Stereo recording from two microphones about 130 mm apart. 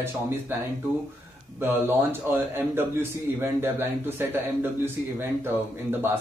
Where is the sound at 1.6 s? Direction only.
15° right (ahead or behind).